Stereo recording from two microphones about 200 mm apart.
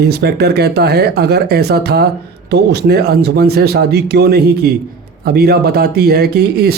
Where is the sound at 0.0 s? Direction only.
55° right (ahead or behind).